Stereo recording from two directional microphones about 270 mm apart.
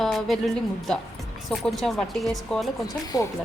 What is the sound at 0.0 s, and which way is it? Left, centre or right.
Speech, centre.